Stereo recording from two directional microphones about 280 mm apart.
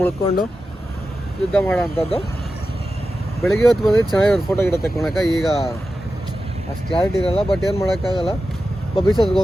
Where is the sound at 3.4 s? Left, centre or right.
Centre.